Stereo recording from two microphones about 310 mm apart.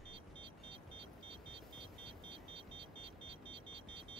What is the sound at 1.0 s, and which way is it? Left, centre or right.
Vehicle, centre.